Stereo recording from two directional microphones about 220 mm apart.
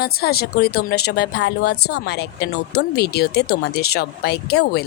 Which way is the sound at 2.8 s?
45° left (ahead or behind).